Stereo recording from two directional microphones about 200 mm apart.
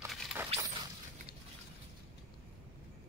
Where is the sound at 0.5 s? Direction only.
20° right (ahead or behind).